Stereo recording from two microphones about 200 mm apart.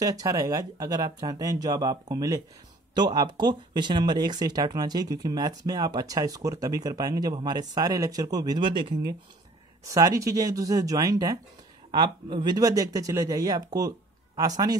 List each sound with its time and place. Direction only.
0.0 s speech: 15° right (ahead or behind)